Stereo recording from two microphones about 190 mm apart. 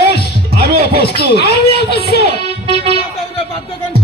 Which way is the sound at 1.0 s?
55° left (ahead or behind).